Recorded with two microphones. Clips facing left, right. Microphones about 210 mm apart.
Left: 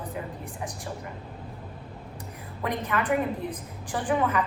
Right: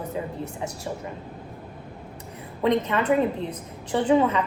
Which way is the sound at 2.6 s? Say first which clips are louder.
Right 7 dB; 25° right (ahead or behind).